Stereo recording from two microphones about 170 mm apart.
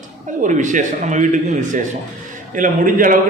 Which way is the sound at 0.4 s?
45° right (ahead or behind).